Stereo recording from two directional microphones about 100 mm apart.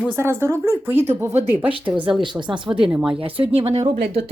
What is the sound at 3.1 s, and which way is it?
Speech, 65° right (ahead or behind).